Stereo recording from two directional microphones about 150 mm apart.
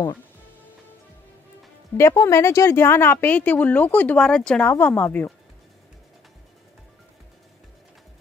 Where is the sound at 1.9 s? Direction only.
20° left (ahead or behind).